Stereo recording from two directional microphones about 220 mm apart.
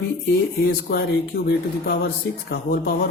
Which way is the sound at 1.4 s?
50° left (ahead or behind).